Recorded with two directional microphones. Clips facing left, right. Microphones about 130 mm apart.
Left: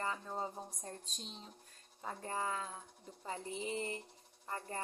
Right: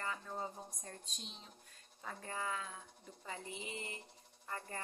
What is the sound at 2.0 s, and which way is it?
A woman's voice, 35° left (ahead or behind).